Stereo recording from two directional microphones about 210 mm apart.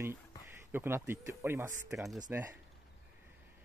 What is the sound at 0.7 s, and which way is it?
Speech, 10° right (ahead or behind).